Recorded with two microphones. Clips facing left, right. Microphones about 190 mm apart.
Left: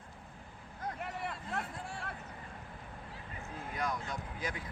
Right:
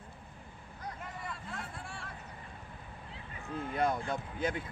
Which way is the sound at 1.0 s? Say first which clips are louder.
Left 3 dB; 65° left (ahead or behind).